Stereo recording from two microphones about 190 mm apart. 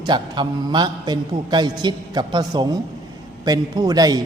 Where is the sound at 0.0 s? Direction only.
25° right (ahead or behind).